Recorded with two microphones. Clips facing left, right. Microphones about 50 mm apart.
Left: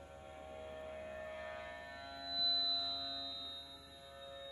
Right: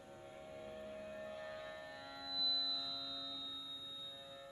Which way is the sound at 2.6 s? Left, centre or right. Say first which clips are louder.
Left 3 dB; centre.